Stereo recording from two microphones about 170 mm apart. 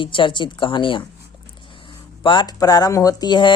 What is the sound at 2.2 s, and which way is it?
Speech, 25° left (ahead or behind).